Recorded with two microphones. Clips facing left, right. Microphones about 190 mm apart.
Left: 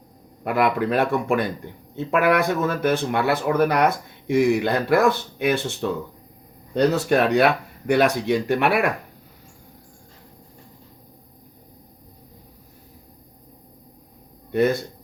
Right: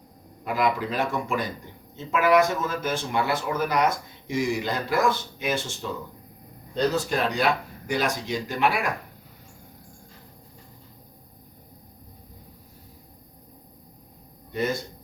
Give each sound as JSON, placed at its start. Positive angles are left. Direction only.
{"t": 0.4, "sound": "speech", "side_deg": 60}
{"t": 14.5, "sound": "speech", "side_deg": 60}